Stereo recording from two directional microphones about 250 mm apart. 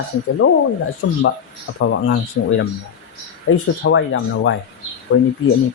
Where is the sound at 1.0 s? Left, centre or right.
Left.